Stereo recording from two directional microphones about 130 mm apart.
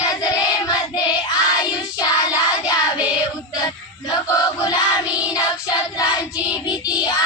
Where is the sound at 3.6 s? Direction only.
30° left (ahead or behind).